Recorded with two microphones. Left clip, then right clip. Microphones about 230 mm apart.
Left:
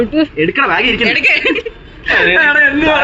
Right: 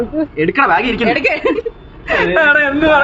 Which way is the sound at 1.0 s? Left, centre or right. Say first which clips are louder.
Left 3 dB; right.